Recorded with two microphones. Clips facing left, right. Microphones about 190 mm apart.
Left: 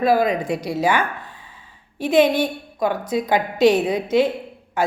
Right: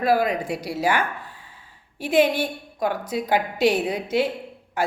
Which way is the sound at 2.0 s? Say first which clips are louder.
Left 3 dB; 10° right (ahead or behind).